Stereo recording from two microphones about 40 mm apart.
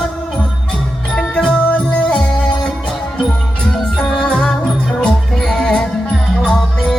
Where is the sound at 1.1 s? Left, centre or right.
Left.